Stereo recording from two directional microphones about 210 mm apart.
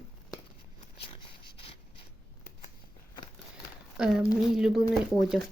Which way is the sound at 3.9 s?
5° right (ahead or behind).